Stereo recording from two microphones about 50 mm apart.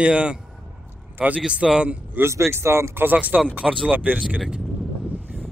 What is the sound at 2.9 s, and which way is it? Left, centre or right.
Speech, right.